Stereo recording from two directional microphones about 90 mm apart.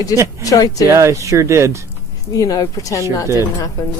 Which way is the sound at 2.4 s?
40° left (ahead or behind).